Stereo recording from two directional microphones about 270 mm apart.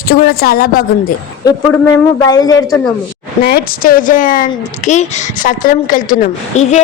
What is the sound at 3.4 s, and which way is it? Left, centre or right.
A woman's voice, left.